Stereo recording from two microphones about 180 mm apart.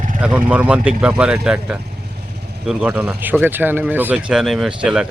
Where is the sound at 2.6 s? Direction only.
10° right (ahead or behind).